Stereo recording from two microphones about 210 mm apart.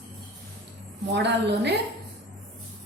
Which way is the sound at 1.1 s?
55° right (ahead or behind).